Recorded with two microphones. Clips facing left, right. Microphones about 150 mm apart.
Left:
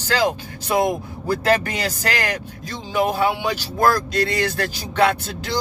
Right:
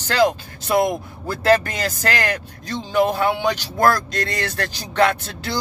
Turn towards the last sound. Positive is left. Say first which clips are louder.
# even
turn(degrees=10)  # may be behind; listen again after turning